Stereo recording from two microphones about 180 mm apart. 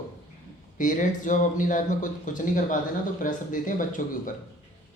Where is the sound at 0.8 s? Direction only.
45° left (ahead or behind).